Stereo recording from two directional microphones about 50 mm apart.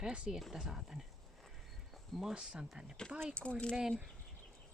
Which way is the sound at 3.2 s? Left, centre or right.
Left.